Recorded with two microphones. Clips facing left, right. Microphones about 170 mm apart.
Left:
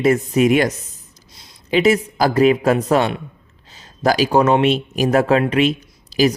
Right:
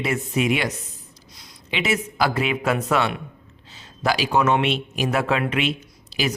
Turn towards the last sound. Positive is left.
turn(degrees=40)  # may be behind; listen again after turning